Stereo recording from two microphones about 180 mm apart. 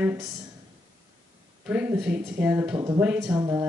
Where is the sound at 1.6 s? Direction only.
10° right (ahead or behind).